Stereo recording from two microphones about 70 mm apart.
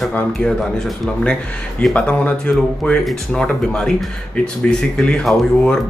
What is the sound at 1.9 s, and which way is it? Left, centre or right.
Speech, centre.